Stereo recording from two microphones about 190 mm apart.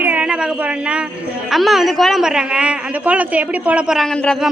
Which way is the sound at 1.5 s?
Centre (ahead or behind).